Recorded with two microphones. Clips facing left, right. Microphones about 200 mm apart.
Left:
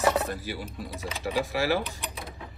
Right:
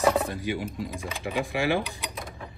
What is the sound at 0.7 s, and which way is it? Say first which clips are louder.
Speech: right 2 dB; 15° right (ahead or behind).